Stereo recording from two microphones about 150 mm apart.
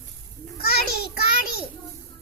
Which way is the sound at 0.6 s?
90° left.